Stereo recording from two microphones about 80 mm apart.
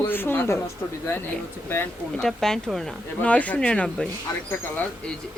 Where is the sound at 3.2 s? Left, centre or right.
Centre.